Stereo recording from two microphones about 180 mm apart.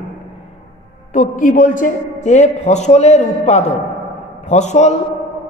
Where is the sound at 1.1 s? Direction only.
45° left (ahead or behind).